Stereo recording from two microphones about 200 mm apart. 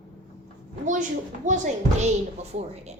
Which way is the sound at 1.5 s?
40° right (ahead or behind).